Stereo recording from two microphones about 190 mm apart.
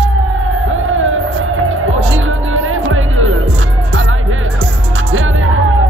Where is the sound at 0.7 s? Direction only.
90° right.